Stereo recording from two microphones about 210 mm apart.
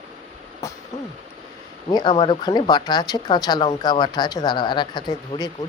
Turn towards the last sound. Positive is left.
turn(degrees=20)  # may be behind; listen again after turning